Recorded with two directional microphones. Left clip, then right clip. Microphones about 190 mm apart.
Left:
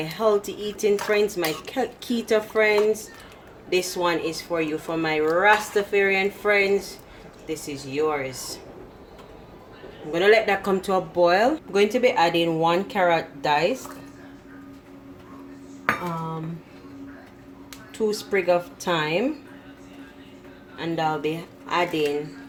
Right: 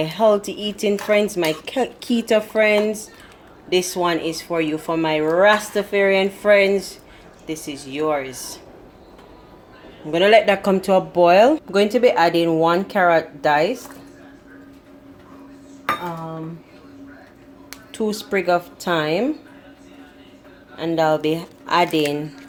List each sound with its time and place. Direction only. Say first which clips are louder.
0.0 s speech: right 5 dB; 35° right (ahead or behind)
3.9 s speech: right 3 dB; 35° right (ahead or behind)
10.1 s speech: right 5 dB; 35° right (ahead or behind)
17.7 s speech: right 1 dB; 35° right (ahead or behind)
20.7 s a woman's voice: right 7 dB; 35° right (ahead or behind)